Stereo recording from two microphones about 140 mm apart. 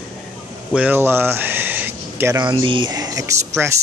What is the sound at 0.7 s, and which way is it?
Speech, 10° right (ahead or behind).